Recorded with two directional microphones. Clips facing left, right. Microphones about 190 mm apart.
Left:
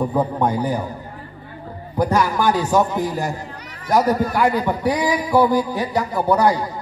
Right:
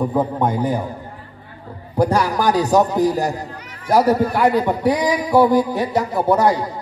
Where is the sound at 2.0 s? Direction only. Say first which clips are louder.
Right 1 dB; 35° right (ahead or behind).